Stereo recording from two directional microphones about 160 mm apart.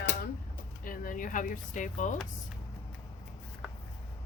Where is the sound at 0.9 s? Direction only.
60° left (ahead or behind).